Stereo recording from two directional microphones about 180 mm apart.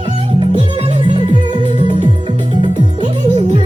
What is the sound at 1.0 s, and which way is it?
Music, 25° right (ahead or behind).